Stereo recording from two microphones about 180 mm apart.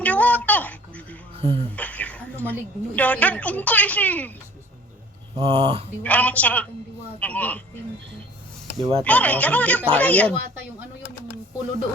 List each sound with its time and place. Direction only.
0.0 s a sound: 10° left (ahead or behind)
1.4 s speech: 30° right (ahead or behind)
1.7 s a woman's voice: 10° left (ahead or behind)
5.4 s speech: 30° right (ahead or behind)
6.0 s speech: 10° left (ahead or behind)
8.8 s speech: 30° right (ahead or behind)
9.0 s speech: 10° left (ahead or behind)